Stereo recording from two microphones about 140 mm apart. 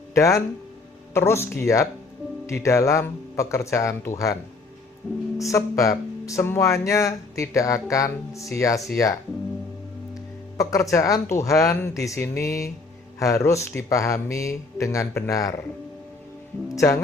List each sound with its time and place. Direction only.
0.1 s speech: 20° left (ahead or behind)
5.5 s speech: 20° left (ahead or behind)
10.6 s speech: 25° left (ahead or behind)
16.6 s speech: 25° left (ahead or behind)